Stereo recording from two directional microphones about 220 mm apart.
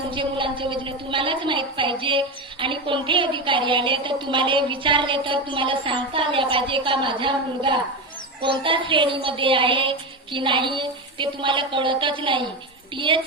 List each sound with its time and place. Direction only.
0.1 s a woman's voice: 20° right (ahead or behind)